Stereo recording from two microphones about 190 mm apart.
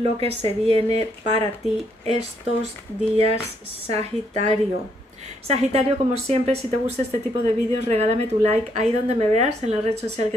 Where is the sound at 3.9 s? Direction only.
35° right (ahead or behind).